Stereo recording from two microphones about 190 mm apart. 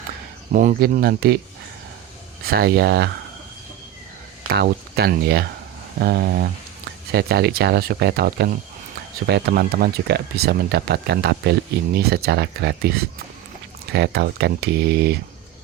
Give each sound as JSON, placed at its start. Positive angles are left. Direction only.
{"t": 0.5, "sound": "speech", "side_deg": -45}
{"t": 2.5, "sound": "speech", "side_deg": -55}
{"t": 4.5, "sound": "speech", "side_deg": -55}